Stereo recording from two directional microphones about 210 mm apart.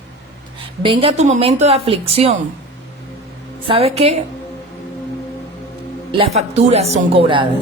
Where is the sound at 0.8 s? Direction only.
25° right (ahead or behind).